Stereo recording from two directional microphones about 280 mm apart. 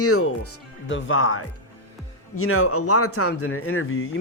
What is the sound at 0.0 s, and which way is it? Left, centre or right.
Speech, left.